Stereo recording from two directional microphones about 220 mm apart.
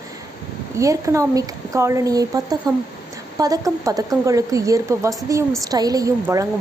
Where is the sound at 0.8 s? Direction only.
15° right (ahead or behind).